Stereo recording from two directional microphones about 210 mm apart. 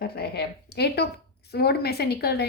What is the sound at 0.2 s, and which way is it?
A woman's voice, 50° left (ahead or behind).